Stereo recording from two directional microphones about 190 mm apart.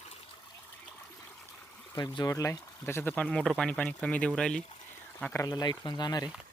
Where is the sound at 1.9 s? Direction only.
20° left (ahead or behind).